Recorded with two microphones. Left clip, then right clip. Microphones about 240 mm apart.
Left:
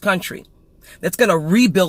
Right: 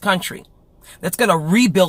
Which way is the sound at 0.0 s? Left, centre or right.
Right.